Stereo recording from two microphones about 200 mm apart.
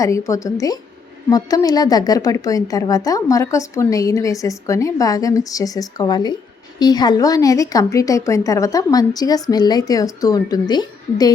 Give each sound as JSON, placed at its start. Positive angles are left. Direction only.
{"t": 0.0, "sound": "a woman's voice", "side_deg": 15}